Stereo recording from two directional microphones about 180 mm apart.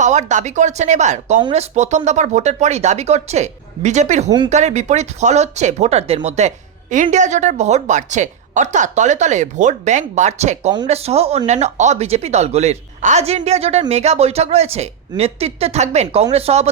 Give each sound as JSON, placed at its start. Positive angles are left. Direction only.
{"t": 0.0, "sound": "speech", "side_deg": -40}